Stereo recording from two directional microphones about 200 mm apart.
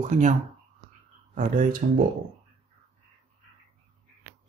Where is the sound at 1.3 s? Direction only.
40° right (ahead or behind).